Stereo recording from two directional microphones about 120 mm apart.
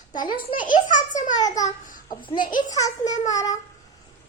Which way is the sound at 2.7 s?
30° left (ahead or behind).